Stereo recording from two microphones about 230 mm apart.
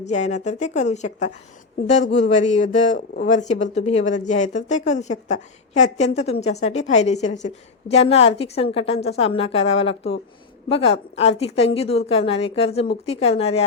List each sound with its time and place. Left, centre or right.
0.1 s a woman's voice: left